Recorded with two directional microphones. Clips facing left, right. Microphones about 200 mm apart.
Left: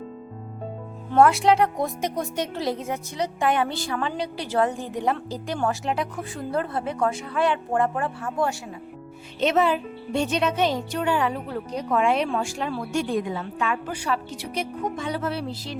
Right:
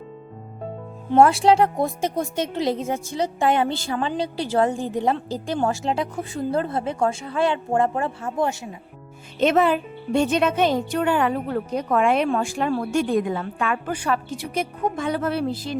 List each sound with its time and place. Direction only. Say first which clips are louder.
1.1 s speech: right 2 dB; 30° right (ahead or behind)
9.4 s speech: right 3 dB; 50° right (ahead or behind)